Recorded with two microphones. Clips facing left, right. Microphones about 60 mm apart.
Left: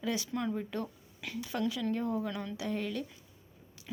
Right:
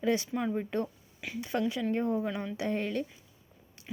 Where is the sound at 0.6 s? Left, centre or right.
Right.